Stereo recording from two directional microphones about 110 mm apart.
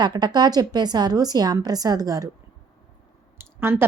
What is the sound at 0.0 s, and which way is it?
A woman's voice, 40° right (ahead or behind).